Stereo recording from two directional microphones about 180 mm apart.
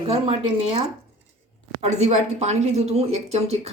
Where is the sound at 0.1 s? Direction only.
35° right (ahead or behind).